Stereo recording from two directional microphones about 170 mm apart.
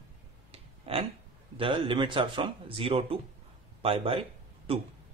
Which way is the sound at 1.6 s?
30° right (ahead or behind).